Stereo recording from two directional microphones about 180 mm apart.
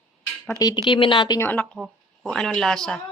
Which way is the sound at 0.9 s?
25° left (ahead or behind).